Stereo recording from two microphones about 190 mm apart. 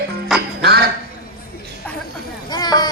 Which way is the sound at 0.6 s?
55° right (ahead or behind).